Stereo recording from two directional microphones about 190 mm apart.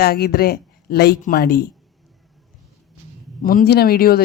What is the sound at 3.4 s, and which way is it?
Speech, 45° left (ahead or behind).